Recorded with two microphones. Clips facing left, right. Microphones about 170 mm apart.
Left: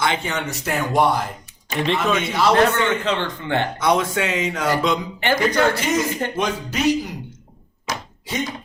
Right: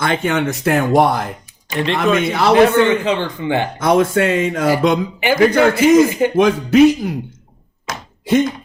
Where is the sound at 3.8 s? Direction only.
50° right (ahead or behind).